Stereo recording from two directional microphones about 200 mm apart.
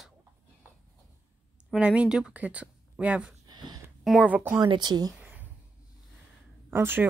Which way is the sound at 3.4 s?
20° right (ahead or behind).